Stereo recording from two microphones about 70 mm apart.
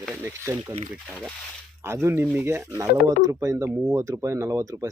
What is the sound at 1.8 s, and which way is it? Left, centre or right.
Speech, right.